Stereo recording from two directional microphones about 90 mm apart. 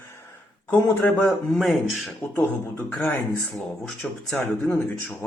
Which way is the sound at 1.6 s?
Centre (ahead or behind).